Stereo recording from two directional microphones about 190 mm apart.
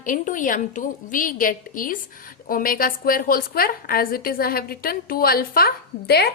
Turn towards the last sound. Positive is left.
turn(degrees=55)  # may be behind; listen again after turning